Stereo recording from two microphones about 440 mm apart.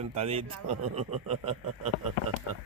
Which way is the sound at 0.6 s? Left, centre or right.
Right.